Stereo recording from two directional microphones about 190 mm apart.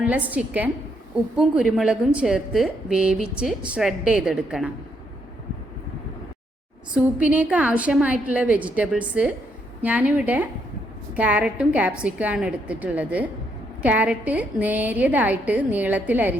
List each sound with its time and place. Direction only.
0.0 s a woman's voice: 5° right (ahead or behind)
6.9 s a woman's voice: 5° right (ahead or behind)